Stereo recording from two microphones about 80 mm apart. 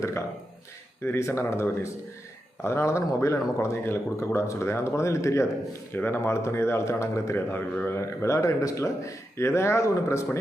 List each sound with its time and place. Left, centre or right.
1.0 s speech: left
5.9 s speech: left